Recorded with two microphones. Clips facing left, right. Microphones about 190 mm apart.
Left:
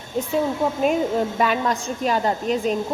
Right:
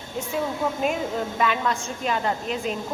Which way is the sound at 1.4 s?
40° left (ahead or behind).